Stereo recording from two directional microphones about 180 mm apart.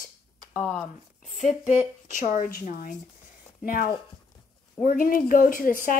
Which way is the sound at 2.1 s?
45° left (ahead or behind).